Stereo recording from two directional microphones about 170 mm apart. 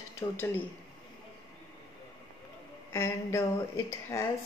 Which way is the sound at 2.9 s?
15° left (ahead or behind).